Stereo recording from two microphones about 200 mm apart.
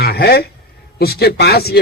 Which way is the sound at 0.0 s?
50° left (ahead or behind).